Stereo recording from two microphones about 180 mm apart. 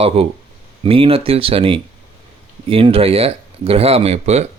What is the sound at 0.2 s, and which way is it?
Speech, 35° right (ahead or behind).